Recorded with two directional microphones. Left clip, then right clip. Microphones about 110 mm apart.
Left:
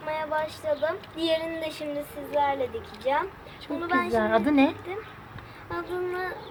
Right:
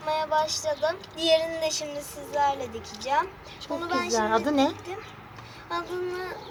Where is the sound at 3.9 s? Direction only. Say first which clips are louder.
Left 3 dB; 35° left (ahead or behind).